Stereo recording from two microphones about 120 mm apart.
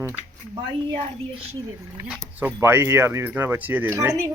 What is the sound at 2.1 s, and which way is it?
Speech, 15° right (ahead or behind).